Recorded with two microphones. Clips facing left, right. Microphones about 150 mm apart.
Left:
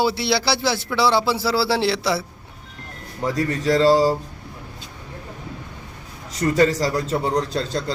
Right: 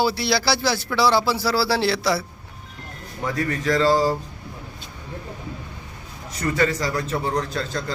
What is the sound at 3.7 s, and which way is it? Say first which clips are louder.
Speech: left 3 dB; 35° left (ahead or behind).